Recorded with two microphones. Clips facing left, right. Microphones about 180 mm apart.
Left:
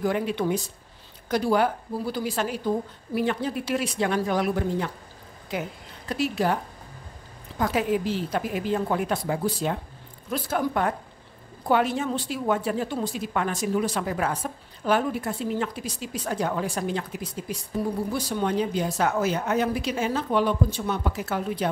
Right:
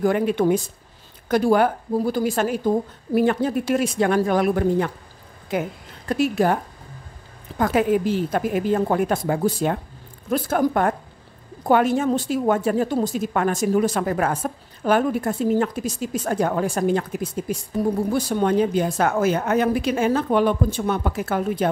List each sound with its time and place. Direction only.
0.0 s a woman's voice: 50° right (ahead or behind)